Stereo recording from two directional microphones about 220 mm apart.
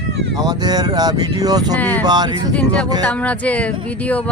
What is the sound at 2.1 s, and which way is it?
Speech, 20° right (ahead or behind).